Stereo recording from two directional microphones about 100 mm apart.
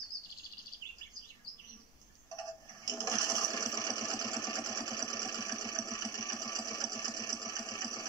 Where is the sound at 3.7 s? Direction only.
40° left (ahead or behind).